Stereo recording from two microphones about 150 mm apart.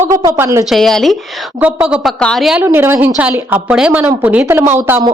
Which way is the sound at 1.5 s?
10° right (ahead or behind).